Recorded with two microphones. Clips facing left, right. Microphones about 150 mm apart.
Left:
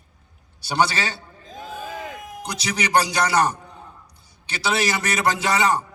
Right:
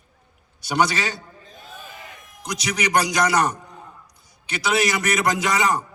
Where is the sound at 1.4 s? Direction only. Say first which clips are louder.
Left 13 dB; 90° left.